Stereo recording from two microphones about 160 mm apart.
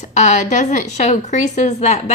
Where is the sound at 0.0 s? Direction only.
50° left (ahead or behind).